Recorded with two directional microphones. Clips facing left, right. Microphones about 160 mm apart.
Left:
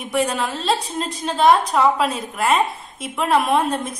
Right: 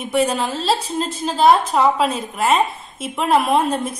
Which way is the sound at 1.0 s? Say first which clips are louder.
Right 2 dB; centre (ahead or behind).